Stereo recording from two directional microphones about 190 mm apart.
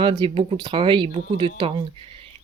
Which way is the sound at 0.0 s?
30° right (ahead or behind).